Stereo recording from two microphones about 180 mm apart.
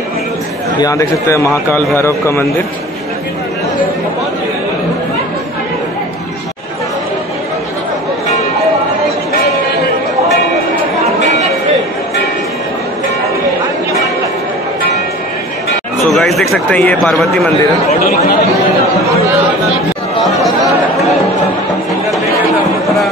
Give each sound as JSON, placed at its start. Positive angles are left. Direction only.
{"t": 0.7, "sound": "speech", "side_deg": 20}
{"t": 16.0, "sound": "a sound", "side_deg": 0}
{"t": 16.5, "sound": "speech", "side_deg": 5}